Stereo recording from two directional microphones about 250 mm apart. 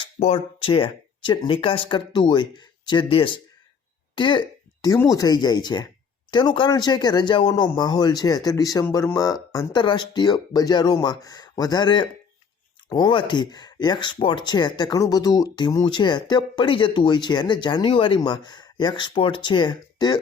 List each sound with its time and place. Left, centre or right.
0.0 s speech: left